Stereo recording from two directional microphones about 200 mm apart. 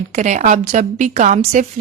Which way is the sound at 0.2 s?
40° right (ahead or behind).